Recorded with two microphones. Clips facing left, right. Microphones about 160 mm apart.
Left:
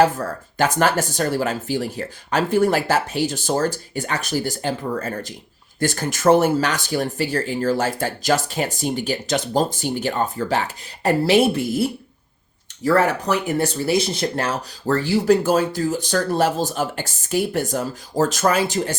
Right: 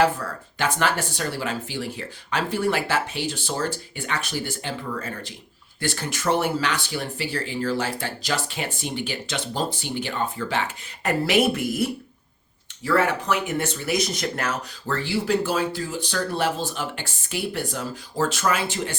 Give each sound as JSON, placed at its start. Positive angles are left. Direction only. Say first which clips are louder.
{"t": 0.0, "sound": "speech", "louder": "left 4 dB", "side_deg": 40}
{"t": 11.0, "sound": "speech", "louder": "left 5 dB", "side_deg": 30}
{"t": 12.8, "sound": "speech", "louder": "left 4 dB", "side_deg": 40}